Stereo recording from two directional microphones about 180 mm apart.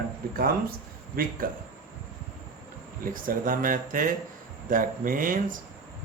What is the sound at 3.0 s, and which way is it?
Speech, 50° right (ahead or behind).